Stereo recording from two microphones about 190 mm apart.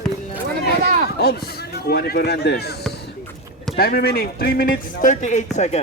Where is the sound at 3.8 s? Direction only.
55° left (ahead or behind).